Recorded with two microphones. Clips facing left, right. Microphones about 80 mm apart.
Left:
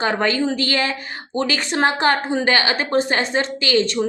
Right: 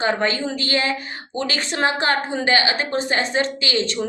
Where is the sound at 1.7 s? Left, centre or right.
Left.